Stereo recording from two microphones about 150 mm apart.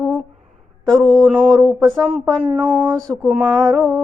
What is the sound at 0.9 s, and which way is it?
Speech, 5° left (ahead or behind).